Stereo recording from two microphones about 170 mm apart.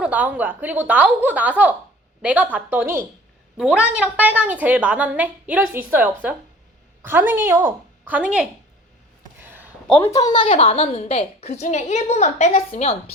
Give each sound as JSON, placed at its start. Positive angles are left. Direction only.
{"t": 0.0, "sound": "a woman's voice", "side_deg": -10}
{"t": 9.4, "sound": "a sound", "side_deg": -10}
{"t": 9.8, "sound": "a woman's voice", "side_deg": 5}
{"t": 10.2, "sound": "a woman's voice", "side_deg": 25}